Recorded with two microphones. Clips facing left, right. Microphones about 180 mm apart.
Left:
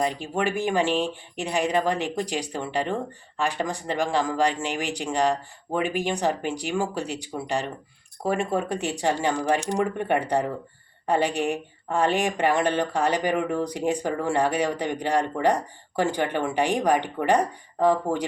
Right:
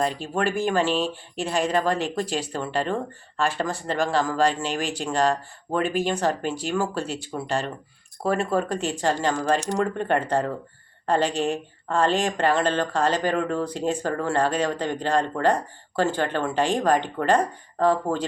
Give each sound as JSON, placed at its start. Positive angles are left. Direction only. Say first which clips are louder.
{"t": 0.0, "sound": "speech", "louder": "right 1 dB", "side_deg": 15}